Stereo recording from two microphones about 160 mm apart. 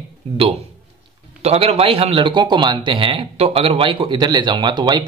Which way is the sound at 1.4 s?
40° right (ahead or behind).